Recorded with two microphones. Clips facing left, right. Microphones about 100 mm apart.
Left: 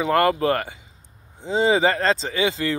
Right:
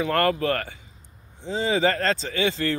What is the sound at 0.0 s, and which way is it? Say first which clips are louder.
Speech: left 3 dB; 20° left (ahead or behind).